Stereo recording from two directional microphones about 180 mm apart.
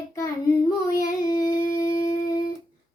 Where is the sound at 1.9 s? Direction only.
50° left (ahead or behind).